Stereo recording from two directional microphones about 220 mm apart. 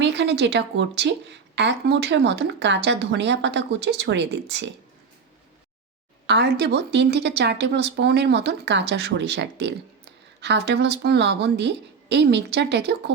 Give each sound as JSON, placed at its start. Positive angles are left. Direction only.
{"t": 0.0, "sound": "speech", "side_deg": -50}
{"t": 6.2, "sound": "speech", "side_deg": -50}